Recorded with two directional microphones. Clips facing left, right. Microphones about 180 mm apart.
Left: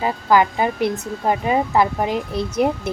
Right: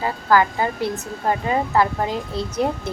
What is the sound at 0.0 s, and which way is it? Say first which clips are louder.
Speech: left 2 dB; 15° left (ahead or behind).